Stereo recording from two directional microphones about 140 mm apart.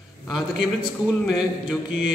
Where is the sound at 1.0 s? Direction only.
5° right (ahead or behind).